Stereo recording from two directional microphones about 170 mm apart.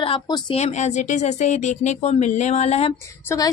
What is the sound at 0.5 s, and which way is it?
Speech, 40° left (ahead or behind).